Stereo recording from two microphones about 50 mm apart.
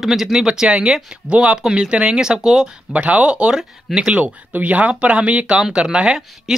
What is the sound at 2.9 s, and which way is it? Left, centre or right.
Speech, right.